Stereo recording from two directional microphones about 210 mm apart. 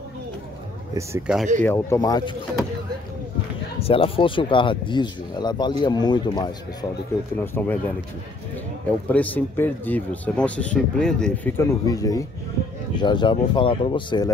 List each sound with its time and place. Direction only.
0.9 s speech: 10° right (ahead or behind)
1.6 s speech: 10° left (ahead or behind)
3.8 s speech: 25° left (ahead or behind)
7.3 s speech: 10° left (ahead or behind)
8.8 s speech: 5° left (ahead or behind)